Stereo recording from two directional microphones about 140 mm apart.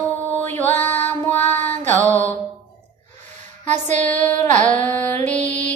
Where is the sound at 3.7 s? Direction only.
55° right (ahead or behind).